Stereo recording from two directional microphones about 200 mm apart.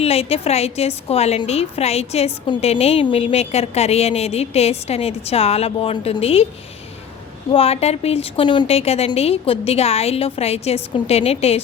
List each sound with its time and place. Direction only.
0.0 s a woman's voice: 30° left (ahead or behind)
7.5 s a woman's voice: 30° left (ahead or behind)